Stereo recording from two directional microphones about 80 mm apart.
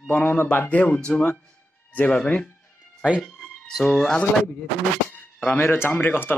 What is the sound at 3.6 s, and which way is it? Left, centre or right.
Speech, centre.